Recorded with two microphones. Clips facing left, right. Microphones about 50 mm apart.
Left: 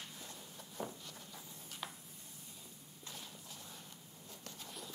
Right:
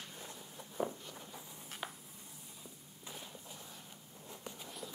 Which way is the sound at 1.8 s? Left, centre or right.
Centre.